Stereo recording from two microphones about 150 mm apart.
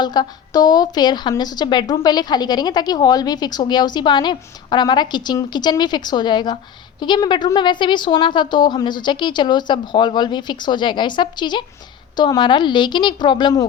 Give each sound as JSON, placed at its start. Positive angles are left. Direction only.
{"t": 0.0, "sound": "a woman's voice", "side_deg": 30}